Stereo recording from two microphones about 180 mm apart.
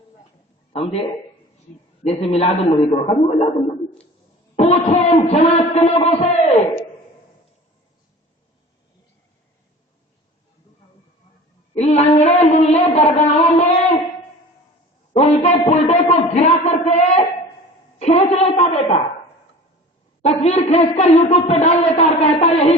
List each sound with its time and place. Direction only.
0.7 s a man's voice: 35° left (ahead or behind)
2.0 s speech: 35° left (ahead or behind)
4.5 s speech: 40° left (ahead or behind)
11.7 s speech: 40° left (ahead or behind)
15.1 s a sound: 35° left (ahead or behind)
18.0 s speech: 35° left (ahead or behind)
20.2 s speech: 35° left (ahead or behind)